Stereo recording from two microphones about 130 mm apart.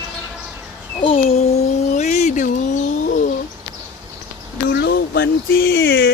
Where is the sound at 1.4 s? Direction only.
60° left (ahead or behind).